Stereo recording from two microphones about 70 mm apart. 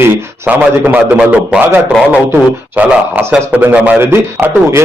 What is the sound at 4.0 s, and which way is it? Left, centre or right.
Speech, right.